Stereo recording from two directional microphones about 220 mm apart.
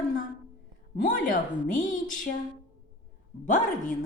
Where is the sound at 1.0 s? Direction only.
35° left (ahead or behind).